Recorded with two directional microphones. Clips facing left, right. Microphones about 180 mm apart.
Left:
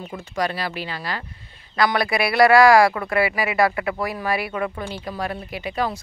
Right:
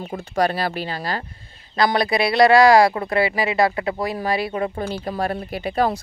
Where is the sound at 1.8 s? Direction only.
25° right (ahead or behind).